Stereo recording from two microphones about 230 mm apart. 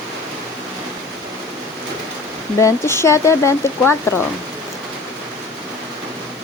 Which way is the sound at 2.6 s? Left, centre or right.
Centre.